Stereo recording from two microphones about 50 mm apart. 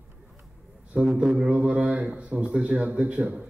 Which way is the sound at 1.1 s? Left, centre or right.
Right.